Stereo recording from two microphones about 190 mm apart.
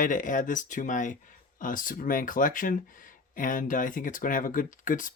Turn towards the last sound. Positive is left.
turn(degrees=45)  # may be behind; listen again after turning